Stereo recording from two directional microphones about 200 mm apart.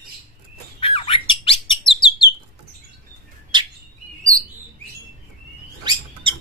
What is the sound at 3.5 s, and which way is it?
Bird, 20° right (ahead or behind).